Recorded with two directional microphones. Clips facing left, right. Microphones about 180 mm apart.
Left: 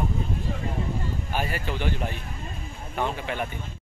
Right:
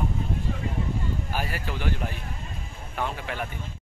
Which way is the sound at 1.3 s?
Centre (ahead or behind).